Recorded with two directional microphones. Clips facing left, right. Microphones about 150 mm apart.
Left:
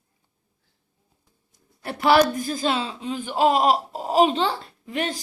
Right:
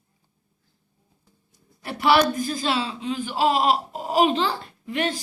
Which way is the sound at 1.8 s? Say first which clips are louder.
Left 1 dB; 45° left (ahead or behind).